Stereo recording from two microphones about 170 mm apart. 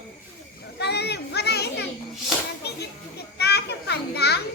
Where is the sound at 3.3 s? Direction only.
75° left (ahead or behind).